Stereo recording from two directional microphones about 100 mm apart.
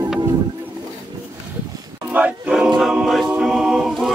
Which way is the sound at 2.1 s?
15° right (ahead or behind).